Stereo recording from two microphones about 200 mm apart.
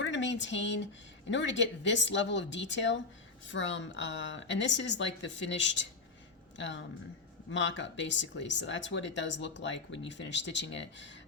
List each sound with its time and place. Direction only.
0.0 s speech: 65° left (ahead or behind)